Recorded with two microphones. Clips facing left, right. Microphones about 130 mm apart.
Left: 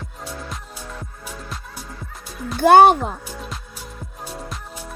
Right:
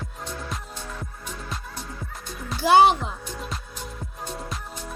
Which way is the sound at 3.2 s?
5° left (ahead or behind).